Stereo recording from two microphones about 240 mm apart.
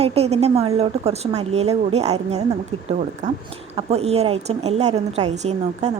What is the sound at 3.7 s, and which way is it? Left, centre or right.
A woman's voice, right.